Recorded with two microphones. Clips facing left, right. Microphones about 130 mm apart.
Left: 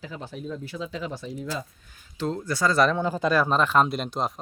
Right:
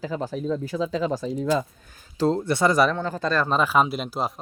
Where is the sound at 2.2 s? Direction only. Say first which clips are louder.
Right 5 dB; 30° right (ahead or behind).